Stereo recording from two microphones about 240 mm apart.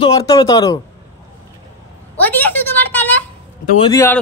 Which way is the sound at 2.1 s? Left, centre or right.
Centre.